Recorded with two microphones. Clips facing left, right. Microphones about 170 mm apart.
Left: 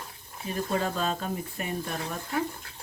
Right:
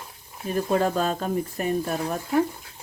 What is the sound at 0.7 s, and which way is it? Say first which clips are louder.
Speech: right 6 dB; 50° right (ahead or behind).